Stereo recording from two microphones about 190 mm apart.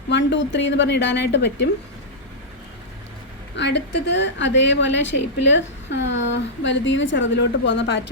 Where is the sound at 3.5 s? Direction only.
65° left (ahead or behind).